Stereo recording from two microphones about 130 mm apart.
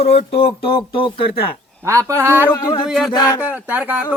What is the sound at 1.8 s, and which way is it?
Speech, 20° right (ahead or behind).